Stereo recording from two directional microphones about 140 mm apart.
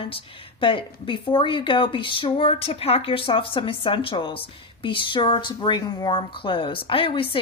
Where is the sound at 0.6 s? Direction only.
35° left (ahead or behind).